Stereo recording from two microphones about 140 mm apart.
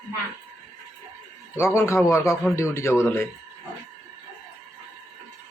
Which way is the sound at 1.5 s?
20° left (ahead or behind).